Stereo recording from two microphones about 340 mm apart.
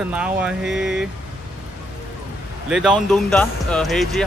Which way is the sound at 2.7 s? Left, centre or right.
Centre.